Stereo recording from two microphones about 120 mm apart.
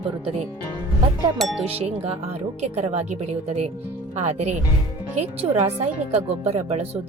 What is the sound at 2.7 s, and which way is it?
Speech, 65° right (ahead or behind).